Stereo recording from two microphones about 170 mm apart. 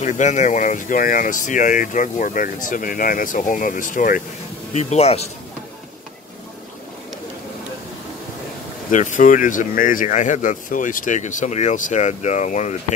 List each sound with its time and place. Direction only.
0.0 s speech: 45° left (ahead or behind)
4.7 s speech: 40° left (ahead or behind)
8.9 s speech: 50° left (ahead or behind)